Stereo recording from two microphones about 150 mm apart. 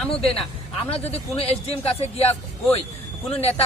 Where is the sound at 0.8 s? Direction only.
45° left (ahead or behind).